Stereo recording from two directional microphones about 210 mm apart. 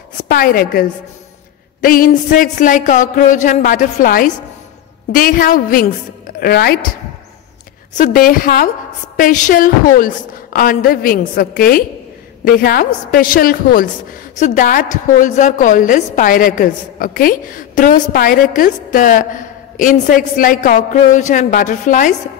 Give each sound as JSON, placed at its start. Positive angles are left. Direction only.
{"t": 0.3, "sound": "a woman's voice", "side_deg": 45}
{"t": 8.0, "sound": "a woman's voice", "side_deg": 40}